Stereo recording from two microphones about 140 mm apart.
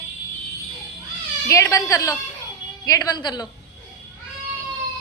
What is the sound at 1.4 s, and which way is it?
A woman's voice, 20° left (ahead or behind).